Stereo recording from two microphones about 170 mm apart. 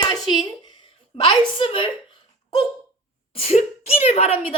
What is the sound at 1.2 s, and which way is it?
Speech, 30° left (ahead or behind).